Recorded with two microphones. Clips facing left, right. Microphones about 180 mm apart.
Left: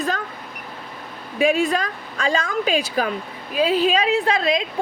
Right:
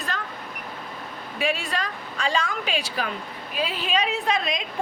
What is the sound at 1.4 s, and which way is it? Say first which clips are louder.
Speech: left 8 dB; 45° left (ahead or behind).